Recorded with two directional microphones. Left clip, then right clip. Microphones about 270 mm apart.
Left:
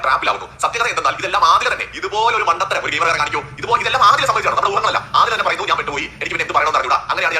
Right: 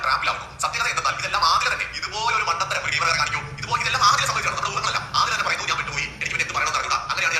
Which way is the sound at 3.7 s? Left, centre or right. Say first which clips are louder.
Left 6 dB; centre.